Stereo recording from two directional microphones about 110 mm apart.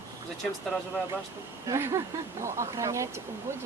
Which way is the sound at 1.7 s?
25° right (ahead or behind).